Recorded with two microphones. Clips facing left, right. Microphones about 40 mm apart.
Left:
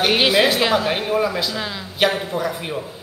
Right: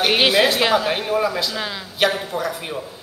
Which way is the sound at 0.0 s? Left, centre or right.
Centre.